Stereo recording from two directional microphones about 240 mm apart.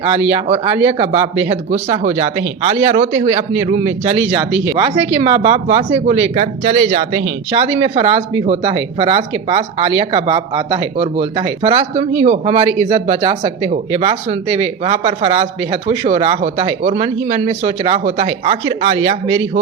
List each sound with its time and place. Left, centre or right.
0.0 s speech: right